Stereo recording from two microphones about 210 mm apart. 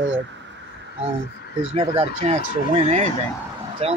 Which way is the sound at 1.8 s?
30° right (ahead or behind).